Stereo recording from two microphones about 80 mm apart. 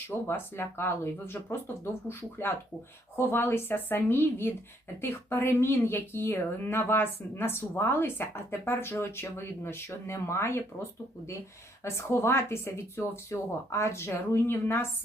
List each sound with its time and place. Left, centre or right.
0.1 s speech: left
11.9 s speech: left